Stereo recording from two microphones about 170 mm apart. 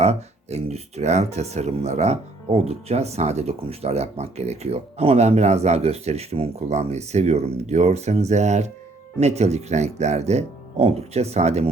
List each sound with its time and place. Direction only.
0.0 s speech: 40° right (ahead or behind)